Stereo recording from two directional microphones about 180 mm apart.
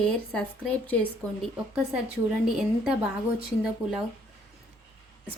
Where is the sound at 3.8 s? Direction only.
30° right (ahead or behind).